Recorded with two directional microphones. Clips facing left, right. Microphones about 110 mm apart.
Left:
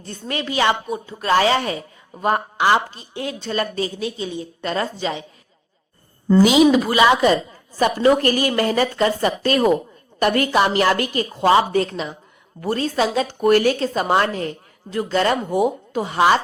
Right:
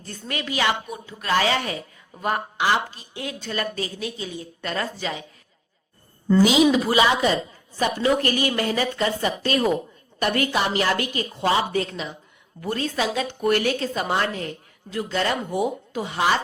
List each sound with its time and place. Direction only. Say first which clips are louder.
0.0 s a woman's voice: left 4 dB; 30° left (ahead or behind)
6.4 s a woman's voice: left 4 dB; 60° left (ahead or behind)
7.8 s a woman's voice: left 5 dB; 45° left (ahead or behind)